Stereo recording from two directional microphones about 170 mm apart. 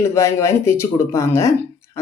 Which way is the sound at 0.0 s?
15° left (ahead or behind).